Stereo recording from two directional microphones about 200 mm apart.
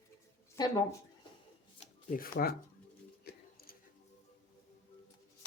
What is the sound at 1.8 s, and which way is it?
Shuffling cards, 45° left (ahead or behind).